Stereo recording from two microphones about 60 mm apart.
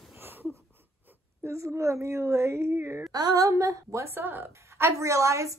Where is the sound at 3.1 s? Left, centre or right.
Right.